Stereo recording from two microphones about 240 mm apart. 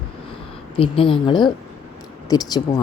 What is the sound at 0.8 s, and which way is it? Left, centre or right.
Speech, left.